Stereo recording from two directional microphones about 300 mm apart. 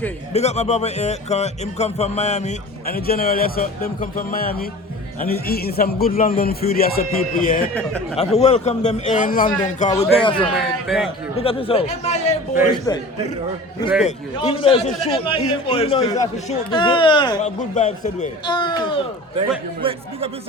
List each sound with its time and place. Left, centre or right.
0.3 s a man's voice: left
10.8 s a man's voice: centre
11.3 s a man's voice: centre
14.0 s a man's voice: centre
19.8 s speech: centre